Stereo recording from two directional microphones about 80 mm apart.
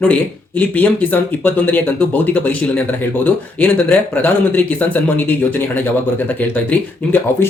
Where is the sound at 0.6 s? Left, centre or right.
Left.